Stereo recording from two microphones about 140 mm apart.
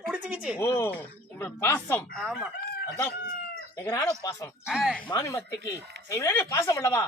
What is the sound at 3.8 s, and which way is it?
Speech, 25° left (ahead or behind).